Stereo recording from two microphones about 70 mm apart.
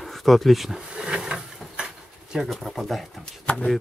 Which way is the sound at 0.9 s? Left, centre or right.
Centre.